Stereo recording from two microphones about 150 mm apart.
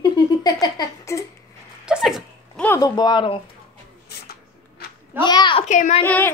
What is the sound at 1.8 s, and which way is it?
Sneeze, 5° right (ahead or behind).